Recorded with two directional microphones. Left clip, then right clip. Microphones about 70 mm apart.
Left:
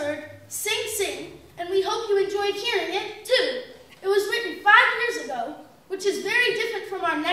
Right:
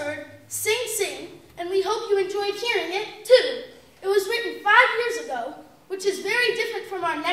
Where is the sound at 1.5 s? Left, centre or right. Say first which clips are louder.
Even; right.